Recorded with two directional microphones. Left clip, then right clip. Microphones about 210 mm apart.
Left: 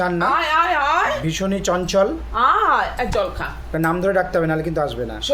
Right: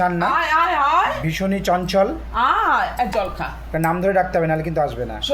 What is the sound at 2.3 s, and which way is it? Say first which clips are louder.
A woman's voice: left 1 dB; 20° left (ahead or behind).